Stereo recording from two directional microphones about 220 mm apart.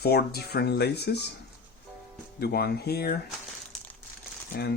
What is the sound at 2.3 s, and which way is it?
Speech, 45° left (ahead or behind).